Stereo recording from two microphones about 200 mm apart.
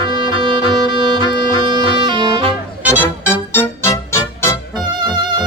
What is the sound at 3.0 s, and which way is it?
Music, 10° left (ahead or behind).